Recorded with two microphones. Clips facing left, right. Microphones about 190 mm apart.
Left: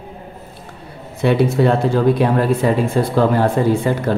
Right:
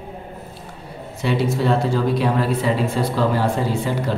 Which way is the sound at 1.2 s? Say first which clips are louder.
Left 5 dB; 55° left (ahead or behind).